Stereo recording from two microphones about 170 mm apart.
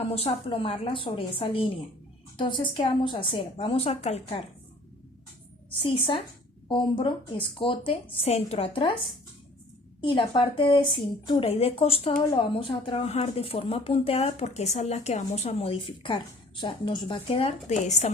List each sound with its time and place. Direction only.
0.0 s speech: 35° left (ahead or behind)
5.8 s speech: 30° left (ahead or behind)